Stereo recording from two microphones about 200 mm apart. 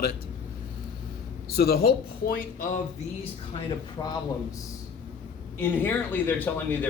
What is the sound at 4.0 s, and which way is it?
Speech, 15° left (ahead or behind).